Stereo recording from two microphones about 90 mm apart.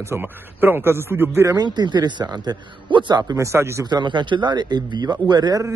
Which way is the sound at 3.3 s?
35° right (ahead or behind).